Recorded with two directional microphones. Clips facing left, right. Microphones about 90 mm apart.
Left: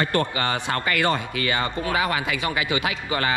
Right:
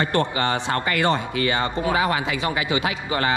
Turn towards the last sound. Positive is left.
turn(degrees=-30)  # may be behind; listen again after turning